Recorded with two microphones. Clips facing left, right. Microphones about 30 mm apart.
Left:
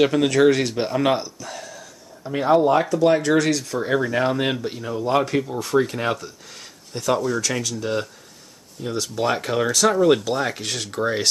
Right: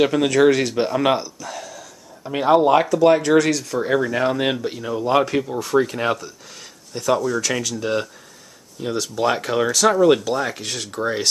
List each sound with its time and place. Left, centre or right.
0.0 s speech: centre
1.6 s a sound: centre
2.2 s speech: centre
3.0 s speech: centre
5.6 s speech: centre
7.8 s speech: centre
8.9 s speech: centre
10.3 s speech: centre